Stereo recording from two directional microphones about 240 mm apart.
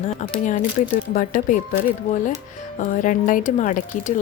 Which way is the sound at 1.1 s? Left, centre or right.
Left.